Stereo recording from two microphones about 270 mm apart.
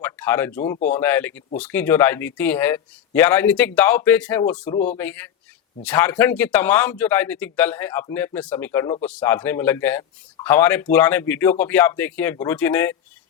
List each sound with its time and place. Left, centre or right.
0.0 s a man's voice: centre